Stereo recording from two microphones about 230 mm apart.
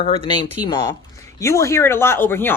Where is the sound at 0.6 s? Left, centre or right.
Centre.